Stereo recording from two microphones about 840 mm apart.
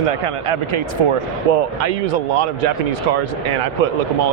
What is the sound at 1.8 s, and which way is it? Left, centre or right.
Speech, right.